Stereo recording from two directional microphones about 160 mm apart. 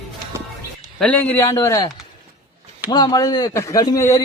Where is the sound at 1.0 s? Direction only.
10° left (ahead or behind).